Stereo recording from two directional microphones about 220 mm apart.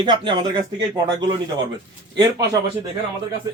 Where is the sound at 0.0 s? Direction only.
20° right (ahead or behind).